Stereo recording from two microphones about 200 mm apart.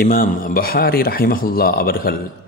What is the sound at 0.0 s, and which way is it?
A man's voice, 45° left (ahead or behind).